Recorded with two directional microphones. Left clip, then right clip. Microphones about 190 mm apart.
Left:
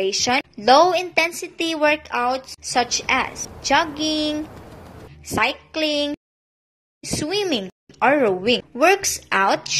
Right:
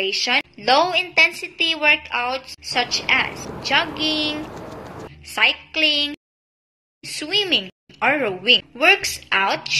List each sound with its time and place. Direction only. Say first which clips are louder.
0.0 s a woman's voice: even; 55° left (ahead or behind)